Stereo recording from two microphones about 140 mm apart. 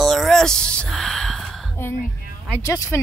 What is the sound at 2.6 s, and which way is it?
Speech, 25° left (ahead or behind).